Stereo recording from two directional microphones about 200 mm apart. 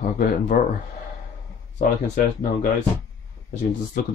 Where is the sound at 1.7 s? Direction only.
45° left (ahead or behind).